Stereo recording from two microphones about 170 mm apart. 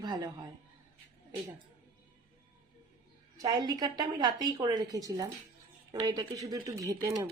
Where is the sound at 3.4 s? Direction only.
25° right (ahead or behind).